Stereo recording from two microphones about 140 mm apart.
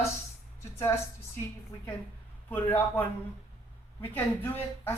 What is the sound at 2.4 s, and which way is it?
Speech, 15° left (ahead or behind).